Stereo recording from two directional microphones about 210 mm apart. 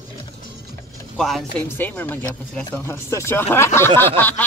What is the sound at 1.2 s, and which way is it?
Speech, centre (ahead or behind).